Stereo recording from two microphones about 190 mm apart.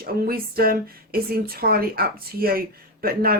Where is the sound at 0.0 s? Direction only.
50° right (ahead or behind).